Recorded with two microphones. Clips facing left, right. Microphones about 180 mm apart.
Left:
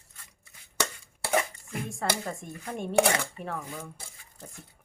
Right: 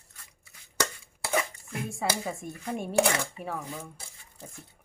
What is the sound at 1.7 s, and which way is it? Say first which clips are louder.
Speech: even; 5° right (ahead or behind).